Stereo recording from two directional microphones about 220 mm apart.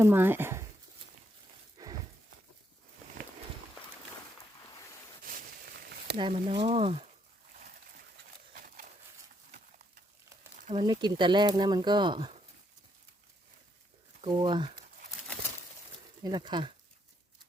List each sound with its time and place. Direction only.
0.0 s speech: 10° right (ahead or behind)
1.8 s a sound: 15° right (ahead or behind)
6.1 s speech: 25° right (ahead or behind)
8.2 s a sound: 50° right (ahead or behind)
8.5 s horse: 40° right (ahead or behind)
10.7 s speech: 25° right (ahead or behind)
14.2 s speech: 25° right (ahead or behind)
16.2 s speech: 20° right (ahead or behind)